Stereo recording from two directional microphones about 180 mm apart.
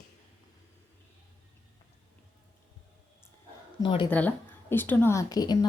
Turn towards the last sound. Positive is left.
turn(degrees=20)  # may be behind; listen again after turning